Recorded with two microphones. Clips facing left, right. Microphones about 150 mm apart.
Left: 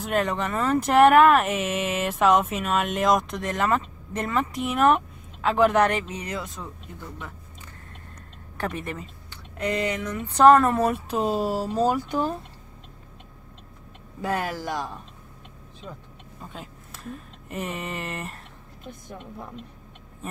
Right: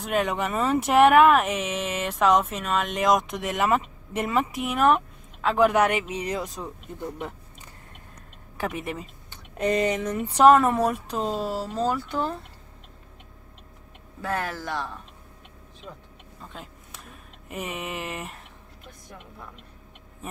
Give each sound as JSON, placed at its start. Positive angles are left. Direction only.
{"t": 0.0, "sound": "speech", "side_deg": 0}
{"t": 8.5, "sound": "speech", "side_deg": -5}
{"t": 9.7, "sound": "speech", "side_deg": -20}
{"t": 10.3, "sound": "speech", "side_deg": -5}
{"t": 14.2, "sound": "speech", "side_deg": 15}
{"t": 16.5, "sound": "speech", "side_deg": 0}
{"t": 18.9, "sound": "a woman's voice", "side_deg": 25}